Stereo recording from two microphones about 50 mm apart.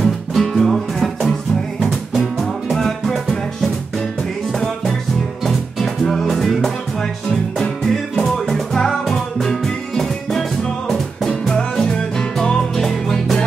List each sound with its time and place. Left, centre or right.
0.0 s music: centre
5.4 s music: centre
7.8 s music: centre